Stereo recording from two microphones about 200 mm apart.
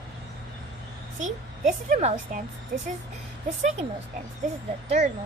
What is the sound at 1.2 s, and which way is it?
A woman's voice, 35° right (ahead or behind).